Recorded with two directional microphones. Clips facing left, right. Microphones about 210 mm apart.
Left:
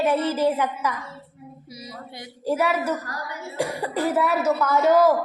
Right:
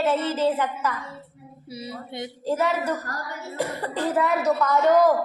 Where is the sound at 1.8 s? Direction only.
25° right (ahead or behind).